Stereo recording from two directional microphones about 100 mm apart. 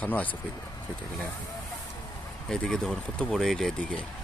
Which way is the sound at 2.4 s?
5° left (ahead or behind).